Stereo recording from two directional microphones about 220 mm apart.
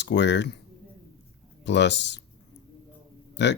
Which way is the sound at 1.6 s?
50° left (ahead or behind).